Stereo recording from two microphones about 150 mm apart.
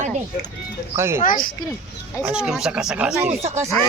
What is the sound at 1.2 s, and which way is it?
Speech, 65° left (ahead or behind).